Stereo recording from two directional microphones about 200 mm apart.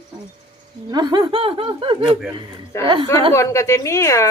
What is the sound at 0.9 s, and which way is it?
Speech, 20° right (ahead or behind).